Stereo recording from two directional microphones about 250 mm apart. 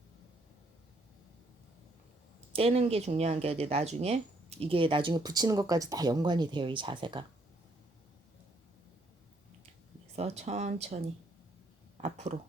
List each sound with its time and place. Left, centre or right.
2.5 s speech: right
10.2 s speech: right